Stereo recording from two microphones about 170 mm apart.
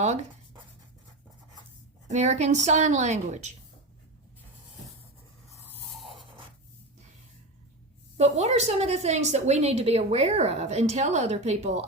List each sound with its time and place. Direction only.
0.0 s speech: 40° right (ahead or behind)
2.0 s speech: 45° right (ahead or behind)
8.2 s a woman's voice: 40° right (ahead or behind)